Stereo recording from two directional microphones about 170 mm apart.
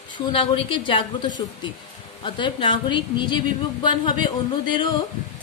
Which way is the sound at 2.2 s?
30° left (ahead or behind).